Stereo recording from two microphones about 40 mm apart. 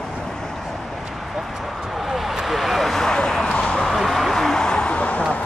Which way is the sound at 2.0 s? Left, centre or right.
Centre.